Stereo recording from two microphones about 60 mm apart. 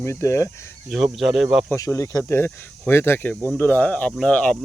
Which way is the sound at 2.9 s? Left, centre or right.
Left.